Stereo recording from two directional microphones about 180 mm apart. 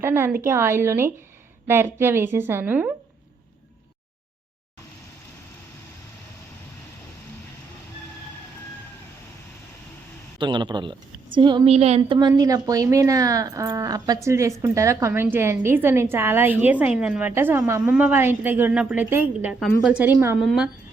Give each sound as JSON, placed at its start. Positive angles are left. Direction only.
{"t": 0.0, "sound": "a woman's voice", "side_deg": -15}
{"t": 10.3, "sound": "a woman's voice", "side_deg": -25}